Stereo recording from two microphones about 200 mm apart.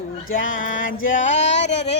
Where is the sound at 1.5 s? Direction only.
60° left (ahead or behind).